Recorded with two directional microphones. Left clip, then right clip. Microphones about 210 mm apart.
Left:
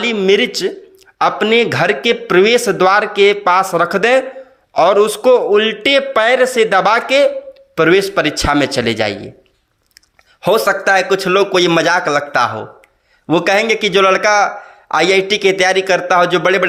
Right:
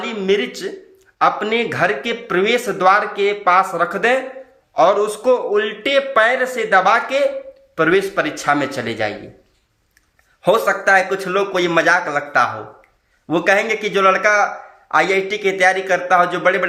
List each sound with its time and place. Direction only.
0.0 s a man's voice: 40° left (ahead or behind)
10.4 s a man's voice: 40° left (ahead or behind)